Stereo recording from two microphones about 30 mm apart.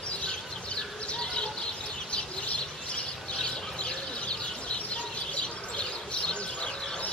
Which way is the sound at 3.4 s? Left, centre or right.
Left.